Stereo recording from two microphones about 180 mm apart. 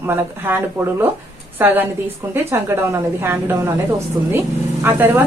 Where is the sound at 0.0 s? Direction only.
15° right (ahead or behind).